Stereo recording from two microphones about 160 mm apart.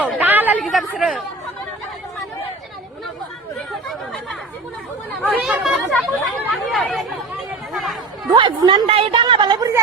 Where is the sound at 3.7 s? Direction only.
Centre (ahead or behind).